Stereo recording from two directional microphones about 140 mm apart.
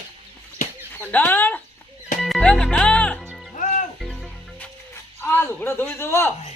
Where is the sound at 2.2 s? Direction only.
5° left (ahead or behind).